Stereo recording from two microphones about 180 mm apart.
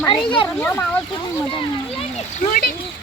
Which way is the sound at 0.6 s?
10° left (ahead or behind).